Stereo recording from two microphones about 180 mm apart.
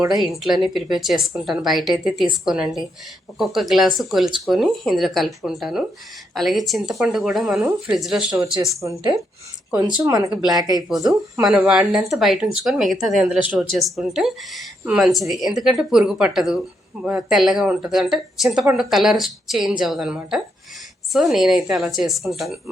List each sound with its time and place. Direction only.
0.0 s speech: centre (ahead or behind)
8.8 s speech: 15° right (ahead or behind)
11.4 s speech: 5° right (ahead or behind)